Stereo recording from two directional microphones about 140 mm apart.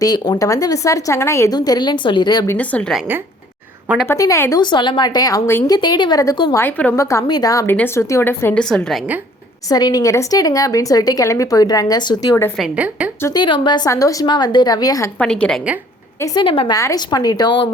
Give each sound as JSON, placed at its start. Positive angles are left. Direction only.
{"t": 0.0, "sound": "a woman's voice", "side_deg": 30}
{"t": 2.5, "sound": "a woman's voice", "side_deg": 10}
{"t": 4.0, "sound": "a woman's voice", "side_deg": 20}
{"t": 4.6, "sound": "a woman's voice", "side_deg": 35}
{"t": 6.6, "sound": "a woman's voice", "side_deg": 10}
{"t": 9.6, "sound": "a woman's voice", "side_deg": 30}
{"t": 12.5, "sound": "a woman's voice", "side_deg": -5}
{"t": 13.2, "sound": "a woman's voice", "side_deg": 30}
{"t": 15.2, "sound": "a woman's voice", "side_deg": 5}
{"t": 16.2, "sound": "a woman's voice", "side_deg": 30}
{"t": 16.7, "sound": "a woman's voice", "side_deg": 25}